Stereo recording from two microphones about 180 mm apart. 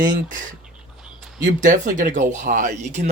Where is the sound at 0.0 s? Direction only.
45° right (ahead or behind).